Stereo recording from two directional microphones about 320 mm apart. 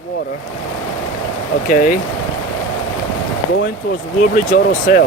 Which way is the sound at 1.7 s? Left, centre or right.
Left.